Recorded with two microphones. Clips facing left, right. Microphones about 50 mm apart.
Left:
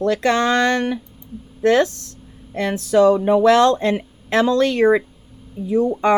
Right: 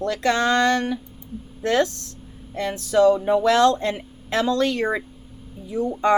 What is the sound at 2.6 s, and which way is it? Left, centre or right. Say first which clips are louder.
Speech: left 3 dB; left.